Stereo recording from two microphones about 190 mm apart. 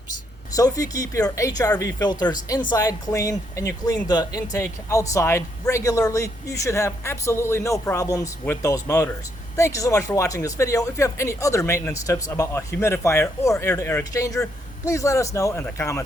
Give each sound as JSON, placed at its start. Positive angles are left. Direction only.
{"t": 0.5, "sound": "speech", "side_deg": 20}